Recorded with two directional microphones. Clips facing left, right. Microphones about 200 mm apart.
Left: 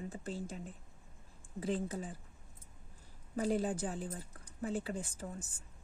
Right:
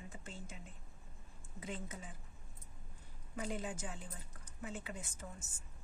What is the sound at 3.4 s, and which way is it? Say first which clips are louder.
Speech: left 8 dB; 35° left (ahead or behind).